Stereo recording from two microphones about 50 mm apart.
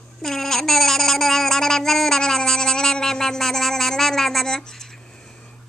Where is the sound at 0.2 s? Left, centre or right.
Centre.